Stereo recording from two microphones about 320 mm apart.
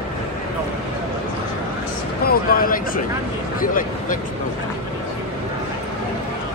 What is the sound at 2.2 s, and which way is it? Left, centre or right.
Speech, left.